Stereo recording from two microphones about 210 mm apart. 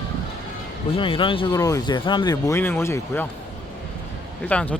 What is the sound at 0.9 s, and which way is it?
Speech, 25° left (ahead or behind).